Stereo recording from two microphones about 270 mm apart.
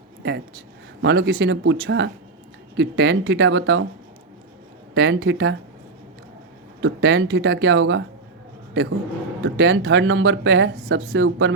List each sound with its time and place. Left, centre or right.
0.2 s a sound: right
1.0 s speech: right
4.9 s speech: right
6.8 s speech: right
9.4 s speech: right